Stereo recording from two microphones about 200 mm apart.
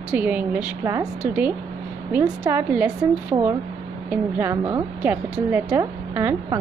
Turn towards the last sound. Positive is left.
turn(degrees=-15)  # may be behind; listen again after turning